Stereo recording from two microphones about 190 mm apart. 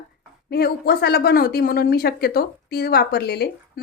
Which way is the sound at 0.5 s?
55° left (ahead or behind).